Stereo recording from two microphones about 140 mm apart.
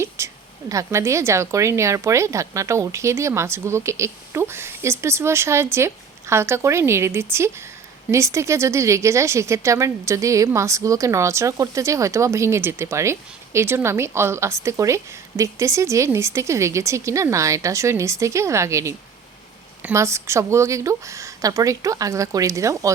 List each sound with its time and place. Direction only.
0.2 s a woman's voice: 20° right (ahead or behind)